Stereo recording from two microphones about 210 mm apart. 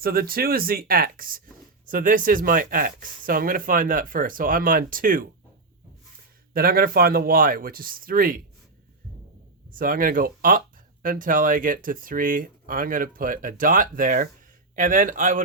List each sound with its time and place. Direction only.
0.0 s speech: 45° right (ahead or behind)
6.5 s speech: 45° right (ahead or behind)
9.7 s speech: 40° right (ahead or behind)